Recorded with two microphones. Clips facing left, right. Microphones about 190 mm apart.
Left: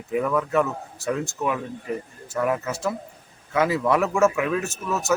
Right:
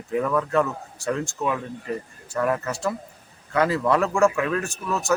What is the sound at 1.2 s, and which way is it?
Speech, 15° left (ahead or behind).